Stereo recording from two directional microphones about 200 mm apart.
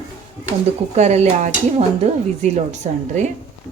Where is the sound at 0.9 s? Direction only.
35° right (ahead or behind).